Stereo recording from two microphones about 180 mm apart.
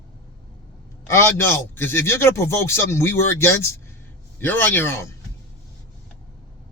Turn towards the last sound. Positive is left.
turn(degrees=15)  # may be behind; listen again after turning